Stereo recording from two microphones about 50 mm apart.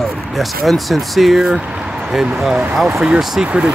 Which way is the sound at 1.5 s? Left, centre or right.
Centre.